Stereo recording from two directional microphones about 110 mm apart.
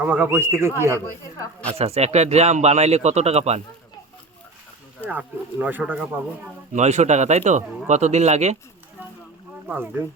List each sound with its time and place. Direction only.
0.0 s speech: 15° right (ahead or behind)
1.8 s speech: 75° right (ahead or behind)
5.0 s speech: 15° right (ahead or behind)
6.7 s speech: 90° right
9.6 s speech: 15° right (ahead or behind)